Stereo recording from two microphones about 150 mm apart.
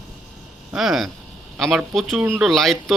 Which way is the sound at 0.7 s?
5° right (ahead or behind).